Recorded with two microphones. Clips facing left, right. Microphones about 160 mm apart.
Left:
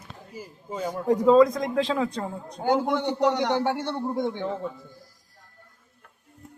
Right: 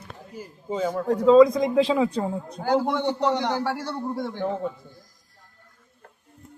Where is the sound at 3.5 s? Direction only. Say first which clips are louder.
Left 2 dB; 20° left (ahead or behind).